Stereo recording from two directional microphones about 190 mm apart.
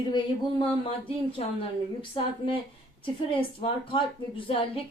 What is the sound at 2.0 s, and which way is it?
A woman's voice, 25° left (ahead or behind).